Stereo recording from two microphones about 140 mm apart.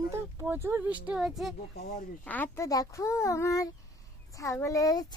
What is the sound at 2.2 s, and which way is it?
Speech, 10° left (ahead or behind).